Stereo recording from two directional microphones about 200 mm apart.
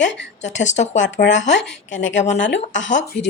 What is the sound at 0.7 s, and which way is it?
Speech, 35° left (ahead or behind).